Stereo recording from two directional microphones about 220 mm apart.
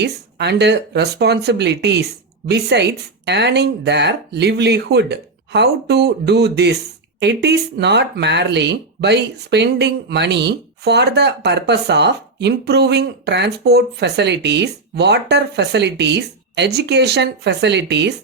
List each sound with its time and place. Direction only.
0.0 s speech: 50° right (ahead or behind)